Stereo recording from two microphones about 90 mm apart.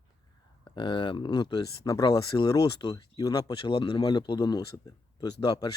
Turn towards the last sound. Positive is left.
turn(degrees=45)  # may be behind; listen again after turning